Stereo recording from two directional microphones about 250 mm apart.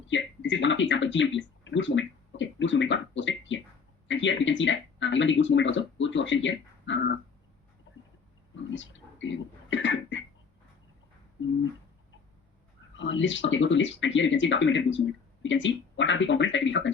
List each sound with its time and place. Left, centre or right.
0.1 s speech: left
8.7 s speech: left
9.2 s a sound: left
13.0 s speech: left